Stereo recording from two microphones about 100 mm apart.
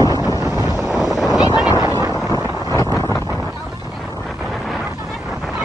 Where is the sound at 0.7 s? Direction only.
5° right (ahead or behind).